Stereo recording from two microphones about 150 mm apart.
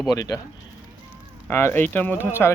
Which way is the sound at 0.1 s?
25° left (ahead or behind).